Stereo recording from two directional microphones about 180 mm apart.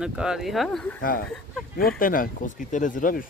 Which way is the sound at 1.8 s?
50° left (ahead or behind).